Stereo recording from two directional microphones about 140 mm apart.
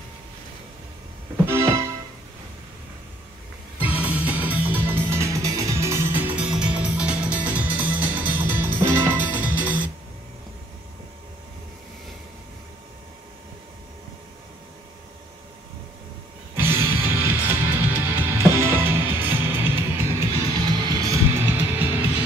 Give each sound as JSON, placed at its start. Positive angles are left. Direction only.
{"t": 1.4, "sound": "music", "side_deg": -15}
{"t": 3.8, "sound": "music", "side_deg": -10}
{"t": 16.5, "sound": "music", "side_deg": -15}
{"t": 20.5, "sound": "music", "side_deg": -30}